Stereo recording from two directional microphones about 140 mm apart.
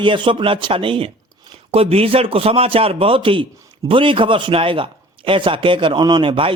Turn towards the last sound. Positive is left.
turn(degrees=-40)  # may be behind; listen again after turning